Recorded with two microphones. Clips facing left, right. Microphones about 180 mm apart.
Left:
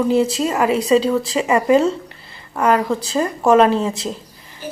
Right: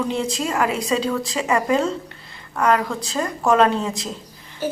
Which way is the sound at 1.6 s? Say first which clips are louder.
Left 6 dB; 5° left (ahead or behind).